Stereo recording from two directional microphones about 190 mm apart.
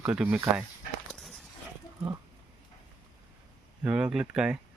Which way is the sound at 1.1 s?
Centre (ahead or behind).